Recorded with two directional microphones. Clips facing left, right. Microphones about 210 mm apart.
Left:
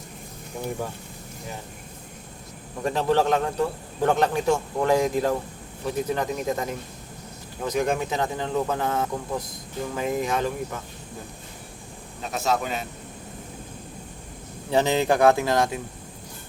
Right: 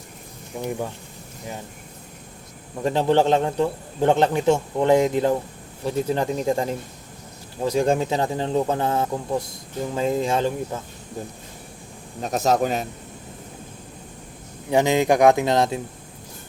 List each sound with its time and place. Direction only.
0.5 s speech: 15° right (ahead or behind)
2.8 s a man's voice: 25° right (ahead or behind)
12.2 s speech: 40° right (ahead or behind)
14.7 s speech: 15° right (ahead or behind)